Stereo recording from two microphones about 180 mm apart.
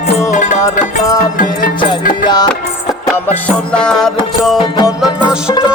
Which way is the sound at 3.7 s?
5° left (ahead or behind).